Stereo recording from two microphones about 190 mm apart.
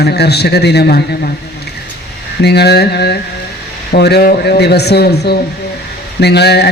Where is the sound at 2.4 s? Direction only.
60° left (ahead or behind).